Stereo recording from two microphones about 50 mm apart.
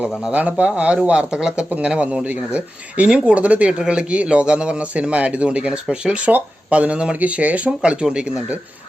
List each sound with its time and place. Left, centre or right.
0.3 s speech: right